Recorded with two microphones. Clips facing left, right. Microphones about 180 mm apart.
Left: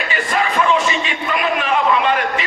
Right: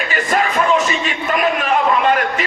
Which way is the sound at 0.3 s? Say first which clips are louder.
Right 1 dB; 45° right (ahead or behind).